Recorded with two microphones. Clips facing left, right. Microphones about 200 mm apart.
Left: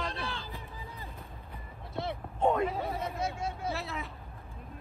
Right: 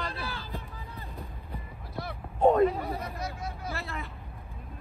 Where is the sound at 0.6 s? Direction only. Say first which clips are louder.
Right 1 dB; 15° left (ahead or behind).